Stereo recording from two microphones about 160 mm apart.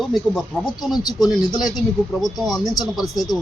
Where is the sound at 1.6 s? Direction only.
Centre (ahead or behind).